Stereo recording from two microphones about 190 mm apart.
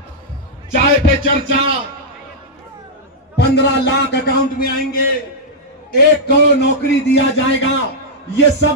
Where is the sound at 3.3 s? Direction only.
60° left (ahead or behind).